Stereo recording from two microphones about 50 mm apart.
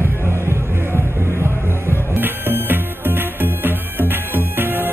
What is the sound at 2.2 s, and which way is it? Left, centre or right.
Music, right.